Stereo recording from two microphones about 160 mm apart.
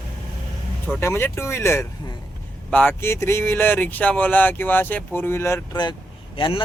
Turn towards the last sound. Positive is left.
turn(degrees=35)  # may be behind; listen again after turning